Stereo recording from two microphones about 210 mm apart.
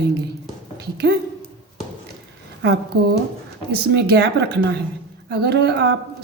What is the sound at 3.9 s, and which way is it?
A woman's voice, 50° right (ahead or behind).